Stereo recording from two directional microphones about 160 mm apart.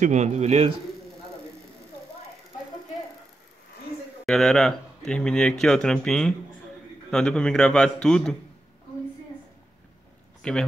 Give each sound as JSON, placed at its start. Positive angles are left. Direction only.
{"t": 0.0, "sound": "a man's voice", "side_deg": -45}
{"t": 4.3, "sound": "speech", "side_deg": 5}
{"t": 10.4, "sound": "speech", "side_deg": 5}